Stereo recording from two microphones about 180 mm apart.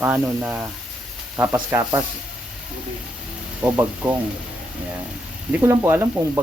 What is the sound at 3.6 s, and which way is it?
Speech, 10° right (ahead or behind).